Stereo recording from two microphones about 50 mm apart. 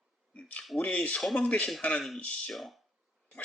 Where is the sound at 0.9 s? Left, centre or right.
Left.